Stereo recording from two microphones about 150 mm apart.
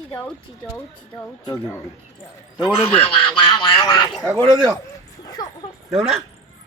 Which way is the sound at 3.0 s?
30° left (ahead or behind).